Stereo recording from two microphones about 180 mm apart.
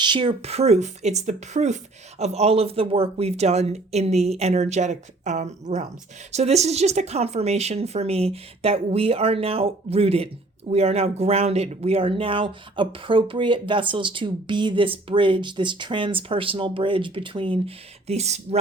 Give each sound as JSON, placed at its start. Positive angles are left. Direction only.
{"t": 0.0, "sound": "speech", "side_deg": -25}